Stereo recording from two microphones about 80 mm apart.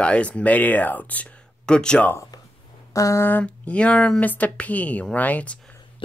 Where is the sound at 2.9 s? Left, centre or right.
Left.